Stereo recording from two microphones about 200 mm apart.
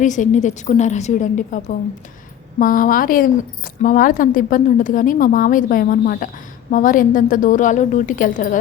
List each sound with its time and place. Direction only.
0.0 s a woman's voice: 40° left (ahead or behind)